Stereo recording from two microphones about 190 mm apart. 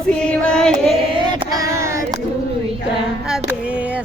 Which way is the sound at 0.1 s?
5° left (ahead or behind).